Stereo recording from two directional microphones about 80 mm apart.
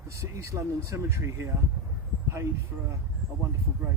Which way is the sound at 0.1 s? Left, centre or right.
Right.